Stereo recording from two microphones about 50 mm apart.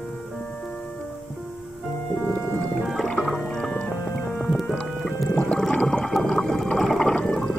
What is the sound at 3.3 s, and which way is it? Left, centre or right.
Music, centre.